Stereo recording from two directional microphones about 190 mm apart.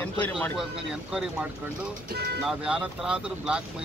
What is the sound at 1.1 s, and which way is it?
Speech, 5° right (ahead or behind).